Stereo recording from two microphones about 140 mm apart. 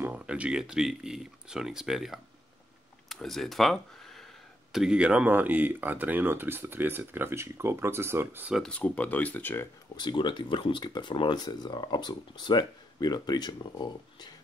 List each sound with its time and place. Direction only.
0.0 s speech: 10° right (ahead or behind)
8.5 s speech: 10° left (ahead or behind)
9.9 s speech: 35° left (ahead or behind)